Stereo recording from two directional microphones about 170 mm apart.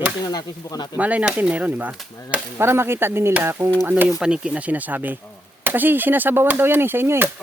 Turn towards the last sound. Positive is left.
turn(degrees=-15)  # may be behind; listen again after turning